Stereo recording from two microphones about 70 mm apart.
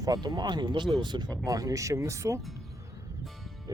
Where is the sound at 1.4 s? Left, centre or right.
Right.